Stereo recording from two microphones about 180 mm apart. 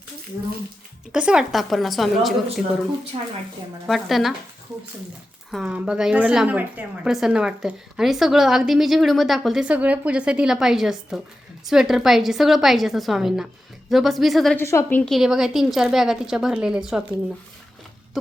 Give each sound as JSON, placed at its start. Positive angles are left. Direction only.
{"t": 1.1, "sound": "a woman's voice", "side_deg": -5}
{"t": 3.1, "sound": "a woman's voice", "side_deg": -30}
{"t": 3.8, "sound": "a woman's voice", "side_deg": 0}
{"t": 5.5, "sound": "a woman's voice", "side_deg": -5}
{"t": 14.6, "sound": "a woman's voice", "side_deg": 15}